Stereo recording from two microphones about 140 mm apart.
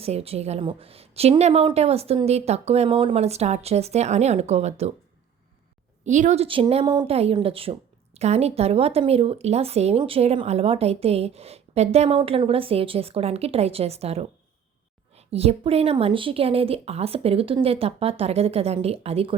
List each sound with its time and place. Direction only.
0.0 s a woman's voice: 45° right (ahead or behind)
6.1 s a woman's voice: 60° right (ahead or behind)
15.3 s a woman's voice: 45° right (ahead or behind)